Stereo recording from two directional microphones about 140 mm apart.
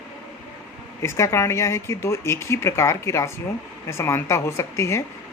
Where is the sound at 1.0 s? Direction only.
20° left (ahead or behind).